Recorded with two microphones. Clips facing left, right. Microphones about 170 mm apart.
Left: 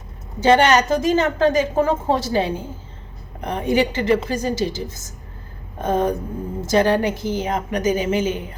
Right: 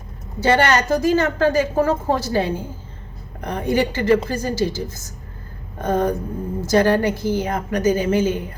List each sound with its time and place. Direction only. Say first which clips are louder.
0.4 s a woman's voice: left 2 dB; 20° left (ahead or behind)